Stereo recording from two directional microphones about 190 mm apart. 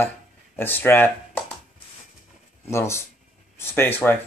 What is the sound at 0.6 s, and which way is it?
Speech, 10° left (ahead or behind).